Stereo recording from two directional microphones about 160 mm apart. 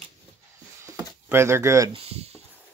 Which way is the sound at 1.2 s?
15° right (ahead or behind).